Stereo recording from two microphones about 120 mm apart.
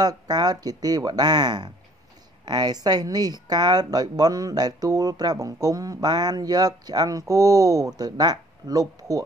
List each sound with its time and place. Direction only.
0.0 s speech: 35° right (ahead or behind)